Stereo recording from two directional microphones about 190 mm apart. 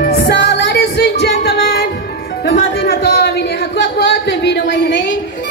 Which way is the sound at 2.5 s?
60° left (ahead or behind).